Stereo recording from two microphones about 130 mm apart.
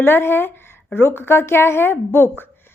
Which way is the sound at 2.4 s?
15° left (ahead or behind).